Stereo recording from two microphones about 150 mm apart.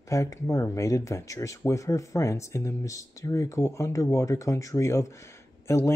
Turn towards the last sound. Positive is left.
turn(degrees=20)  # may be behind; listen again after turning